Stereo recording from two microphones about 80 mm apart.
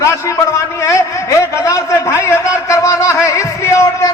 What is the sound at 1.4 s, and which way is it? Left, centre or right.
A man's voice, left.